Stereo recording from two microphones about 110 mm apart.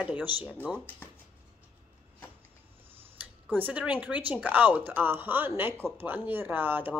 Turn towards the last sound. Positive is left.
turn(degrees=-15)  # may be behind; listen again after turning